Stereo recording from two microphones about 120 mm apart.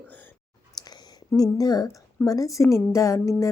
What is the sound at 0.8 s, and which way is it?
Clicking, 35° left (ahead or behind).